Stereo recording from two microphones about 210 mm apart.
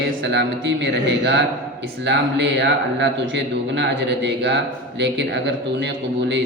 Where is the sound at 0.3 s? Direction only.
60° right (ahead or behind).